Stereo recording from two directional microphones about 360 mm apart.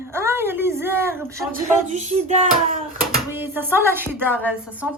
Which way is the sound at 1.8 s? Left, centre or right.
Centre.